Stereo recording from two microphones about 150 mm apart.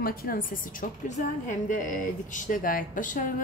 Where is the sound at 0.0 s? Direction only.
75° left (ahead or behind).